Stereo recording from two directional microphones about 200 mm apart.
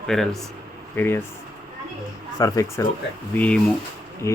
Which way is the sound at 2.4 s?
15° left (ahead or behind).